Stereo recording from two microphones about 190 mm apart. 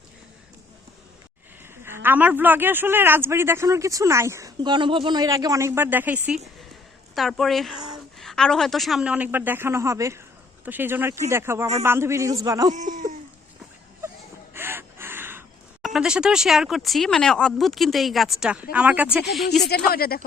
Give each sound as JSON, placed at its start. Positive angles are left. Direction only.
{"t": 1.8, "sound": "speech", "side_deg": -10}
{"t": 12.7, "sound": "speech", "side_deg": -40}
{"t": 14.5, "sound": "gasp", "side_deg": -10}
{"t": 15.8, "sound": "speech", "side_deg": -5}
{"t": 19.9, "sound": "speech", "side_deg": 55}